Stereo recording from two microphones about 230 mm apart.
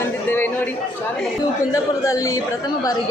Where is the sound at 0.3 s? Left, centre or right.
Centre.